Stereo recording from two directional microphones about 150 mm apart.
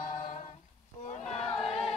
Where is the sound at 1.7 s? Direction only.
40° left (ahead or behind).